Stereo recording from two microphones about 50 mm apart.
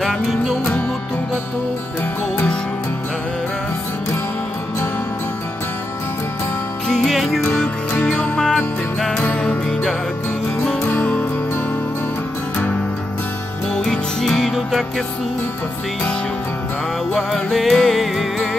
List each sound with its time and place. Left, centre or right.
0.0 s music: centre
6.9 s music: centre
10.9 s music: left
14.2 s music: centre
17.1 s music: centre